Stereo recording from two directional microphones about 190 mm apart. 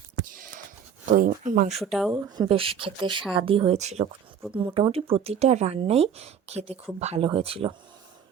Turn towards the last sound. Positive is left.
turn(degrees=-30)  # may be behind; listen again after turning